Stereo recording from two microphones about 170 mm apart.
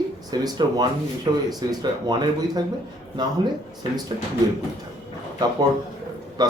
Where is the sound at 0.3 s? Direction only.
25° right (ahead or behind).